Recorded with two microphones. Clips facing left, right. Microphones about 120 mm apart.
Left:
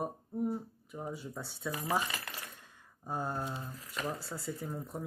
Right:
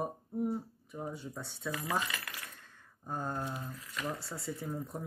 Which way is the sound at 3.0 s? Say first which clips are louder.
Left 1 dB; 10° left (ahead or behind).